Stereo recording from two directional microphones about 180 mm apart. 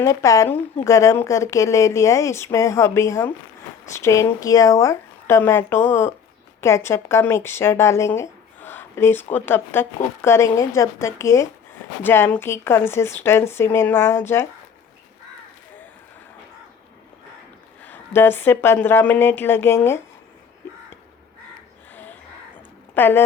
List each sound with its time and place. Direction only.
0.0 s a woman's voice: 15° left (ahead or behind)
17.8 s a woman's voice: 10° left (ahead or behind)
23.0 s a woman's voice: 10° left (ahead or behind)